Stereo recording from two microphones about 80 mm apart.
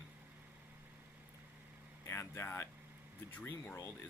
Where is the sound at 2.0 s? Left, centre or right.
Left.